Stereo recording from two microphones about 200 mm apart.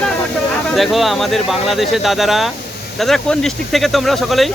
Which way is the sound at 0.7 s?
Centre (ahead or behind).